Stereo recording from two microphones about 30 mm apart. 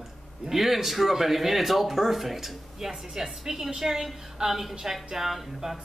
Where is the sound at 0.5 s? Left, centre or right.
Centre.